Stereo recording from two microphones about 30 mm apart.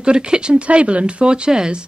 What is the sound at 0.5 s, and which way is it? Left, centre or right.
Speech, right.